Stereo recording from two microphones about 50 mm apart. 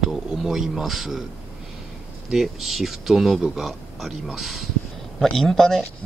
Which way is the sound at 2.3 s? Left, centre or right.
Centre.